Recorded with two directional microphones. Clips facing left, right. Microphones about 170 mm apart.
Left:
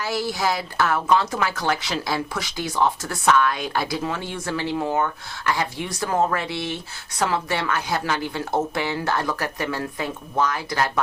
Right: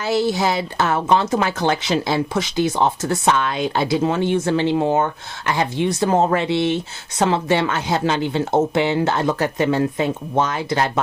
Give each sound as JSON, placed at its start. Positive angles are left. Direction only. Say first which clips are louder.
{"t": 0.0, "sound": "a woman's voice", "louder": "right 6 dB", "side_deg": -25}